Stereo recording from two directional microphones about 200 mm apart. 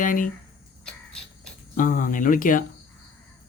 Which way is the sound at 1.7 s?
40° left (ahead or behind).